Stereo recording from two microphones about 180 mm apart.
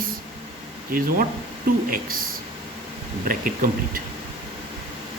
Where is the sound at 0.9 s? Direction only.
50° right (ahead or behind).